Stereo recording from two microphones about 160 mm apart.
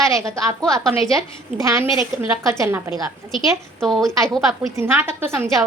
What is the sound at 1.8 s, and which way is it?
Speech, 35° left (ahead or behind).